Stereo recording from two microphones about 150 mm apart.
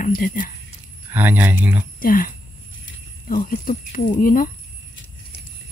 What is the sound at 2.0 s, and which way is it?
Speech, 70° left (ahead or behind).